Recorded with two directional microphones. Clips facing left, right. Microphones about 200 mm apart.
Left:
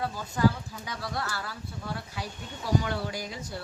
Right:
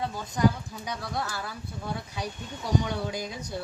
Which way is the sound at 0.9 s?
15° right (ahead or behind).